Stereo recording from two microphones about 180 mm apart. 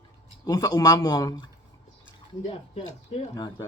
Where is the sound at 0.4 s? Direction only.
20° left (ahead or behind).